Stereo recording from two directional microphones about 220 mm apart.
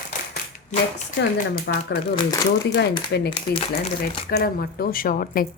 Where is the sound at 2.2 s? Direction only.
15° left (ahead or behind).